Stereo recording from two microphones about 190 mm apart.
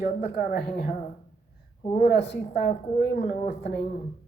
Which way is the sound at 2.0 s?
60° left (ahead or behind).